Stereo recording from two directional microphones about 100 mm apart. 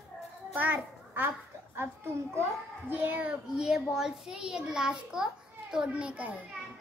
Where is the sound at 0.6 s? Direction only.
20° right (ahead or behind).